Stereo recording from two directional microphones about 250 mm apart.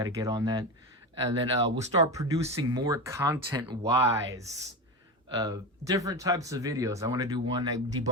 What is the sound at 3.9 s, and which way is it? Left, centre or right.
Speech, centre.